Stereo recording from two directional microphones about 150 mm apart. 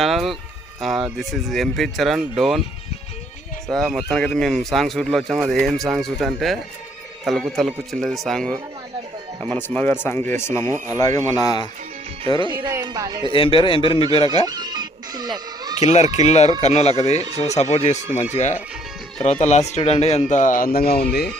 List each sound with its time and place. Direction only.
0.0 s speech: centre (ahead or behind)
3.7 s speech: centre (ahead or behind); by 11.7 s 25° left (ahead or behind)
12.7 s speech: 25° right (ahead or behind)
13.3 s a man's voice: 35° left (ahead or behind)
14.4 s music: 25° right (ahead or behind)
15.7 s speech: 45° left (ahead or behind)
17.2 s speech: 25° right (ahead or behind)
17.4 s speech: 50° left (ahead or behind); by 21.2 s 90° left